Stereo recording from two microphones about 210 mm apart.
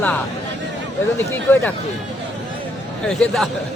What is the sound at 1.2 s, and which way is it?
Speech, 10° left (ahead or behind).